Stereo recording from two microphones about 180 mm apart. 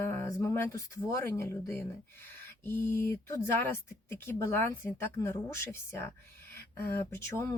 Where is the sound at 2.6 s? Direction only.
10° left (ahead or behind).